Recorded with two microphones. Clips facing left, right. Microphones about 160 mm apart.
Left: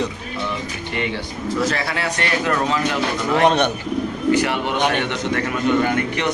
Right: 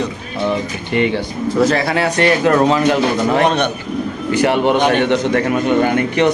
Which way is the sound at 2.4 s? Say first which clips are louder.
Right 7 dB; 45° right (ahead or behind).